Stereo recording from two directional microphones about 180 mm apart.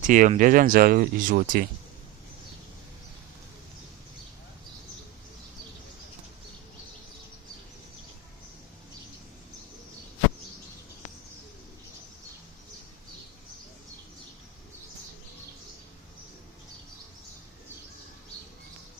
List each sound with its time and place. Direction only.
0.0 s speech: 45° right (ahead or behind)